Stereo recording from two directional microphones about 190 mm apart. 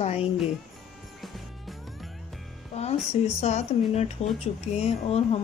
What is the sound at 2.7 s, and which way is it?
Music, 35° left (ahead or behind).